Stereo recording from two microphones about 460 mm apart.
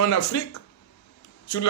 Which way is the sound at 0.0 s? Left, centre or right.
Left.